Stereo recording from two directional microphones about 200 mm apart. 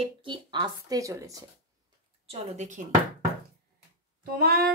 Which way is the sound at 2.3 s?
35° right (ahead or behind).